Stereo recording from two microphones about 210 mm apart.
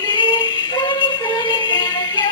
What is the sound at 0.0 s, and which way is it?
Music, 20° left (ahead or behind).